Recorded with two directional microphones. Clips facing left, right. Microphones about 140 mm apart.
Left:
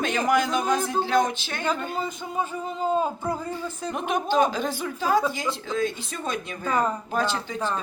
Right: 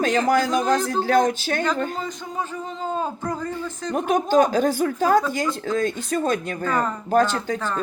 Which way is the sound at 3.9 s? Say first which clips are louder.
Right 6 dB; 45° right (ahead or behind).